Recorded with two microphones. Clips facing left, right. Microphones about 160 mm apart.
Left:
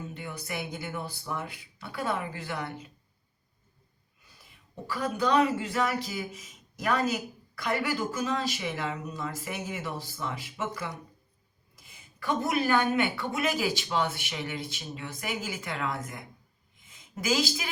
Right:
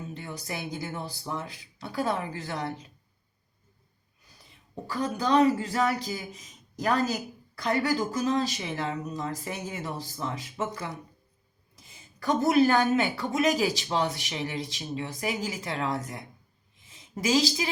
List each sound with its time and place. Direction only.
0.1 s a woman's voice: 35° right (ahead or behind)
4.4 s a woman's voice: 35° right (ahead or behind)
16.8 s a sound: 30° right (ahead or behind)